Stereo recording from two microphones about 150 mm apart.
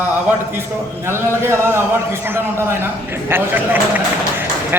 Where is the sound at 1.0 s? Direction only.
15° right (ahead or behind).